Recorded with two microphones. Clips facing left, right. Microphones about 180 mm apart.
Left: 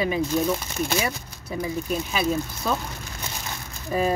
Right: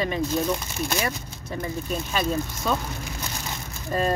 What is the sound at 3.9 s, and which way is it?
Speech, 5° left (ahead or behind).